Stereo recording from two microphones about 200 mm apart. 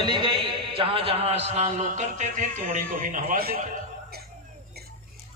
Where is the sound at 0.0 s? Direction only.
20° right (ahead or behind); by 3.7 s 45° right (ahead or behind).